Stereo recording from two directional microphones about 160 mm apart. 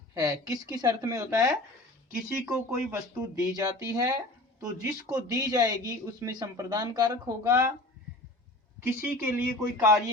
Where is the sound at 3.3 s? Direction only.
20° right (ahead or behind).